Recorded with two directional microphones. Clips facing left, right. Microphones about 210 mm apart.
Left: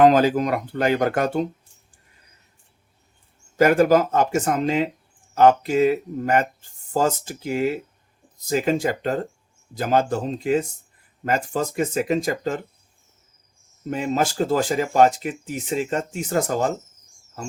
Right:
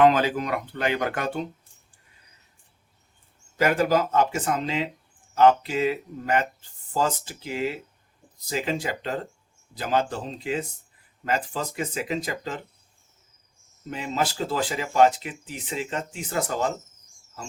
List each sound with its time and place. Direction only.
0.0 s speech: 40° left (ahead or behind)
3.6 s speech: 45° left (ahead or behind)
13.9 s speech: 45° left (ahead or behind)